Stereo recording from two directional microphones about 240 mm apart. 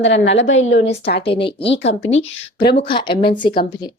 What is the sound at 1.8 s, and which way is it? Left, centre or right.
Speech, left.